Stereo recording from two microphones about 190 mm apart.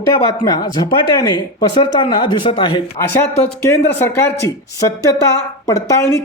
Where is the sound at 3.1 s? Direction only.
10° left (ahead or behind).